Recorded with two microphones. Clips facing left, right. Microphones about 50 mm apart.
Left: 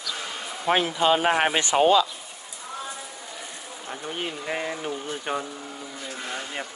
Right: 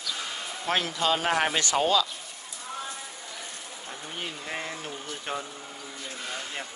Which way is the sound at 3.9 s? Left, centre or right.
Left.